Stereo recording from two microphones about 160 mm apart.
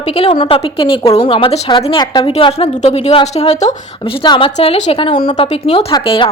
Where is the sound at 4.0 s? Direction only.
30° left (ahead or behind).